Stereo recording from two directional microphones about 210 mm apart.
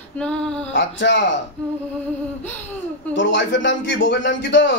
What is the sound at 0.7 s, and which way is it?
Speech, 60° left (ahead or behind).